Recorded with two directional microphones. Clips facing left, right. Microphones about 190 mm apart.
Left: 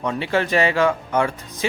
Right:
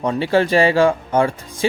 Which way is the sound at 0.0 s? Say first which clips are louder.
Right 5 dB; 35° right (ahead or behind).